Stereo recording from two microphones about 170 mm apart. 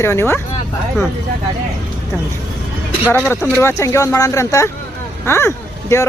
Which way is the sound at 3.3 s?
15° left (ahead or behind).